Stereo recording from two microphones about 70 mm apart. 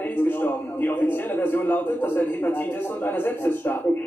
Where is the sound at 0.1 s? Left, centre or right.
Left.